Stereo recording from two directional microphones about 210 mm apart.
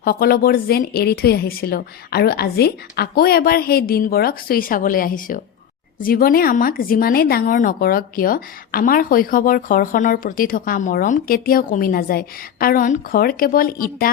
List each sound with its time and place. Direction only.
0.0 s speech: 45° left (ahead or behind)